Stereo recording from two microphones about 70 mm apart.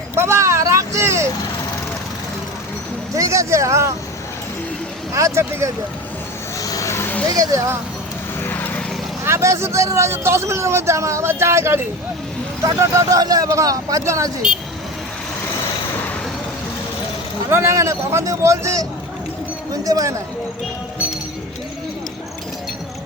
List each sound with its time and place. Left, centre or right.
0.1 s vehicle: right
3.2 s a man's voice: right
5.1 s a man's voice: right
6.6 s vehicle: left
7.3 s speech: right
8.4 s vehicle: left
9.2 s speech: right
12.8 s a man's voice: right
13.1 s speech: right
17.5 s a man's voice: right
19.7 s speech: right